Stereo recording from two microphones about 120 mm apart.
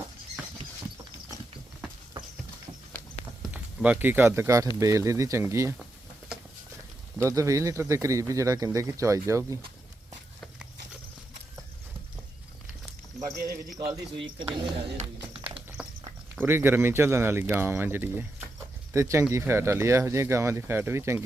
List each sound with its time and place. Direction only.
3.8 s speech: 10° right (ahead or behind)
7.2 s speech: 25° right (ahead or behind)
14.6 s speech: 45° right (ahead or behind)
15.8 s a sound: 5° right (ahead or behind)
16.3 s speech: 15° right (ahead or behind)